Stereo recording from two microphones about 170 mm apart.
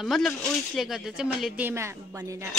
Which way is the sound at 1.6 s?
15° right (ahead or behind).